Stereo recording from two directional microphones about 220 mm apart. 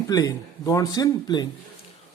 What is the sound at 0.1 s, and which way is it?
Speech, 15° left (ahead or behind).